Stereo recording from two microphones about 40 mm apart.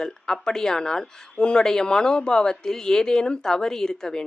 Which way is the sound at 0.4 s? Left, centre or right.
Centre.